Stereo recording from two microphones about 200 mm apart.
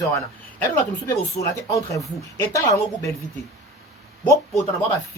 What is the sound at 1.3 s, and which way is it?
Speech, 15° left (ahead or behind).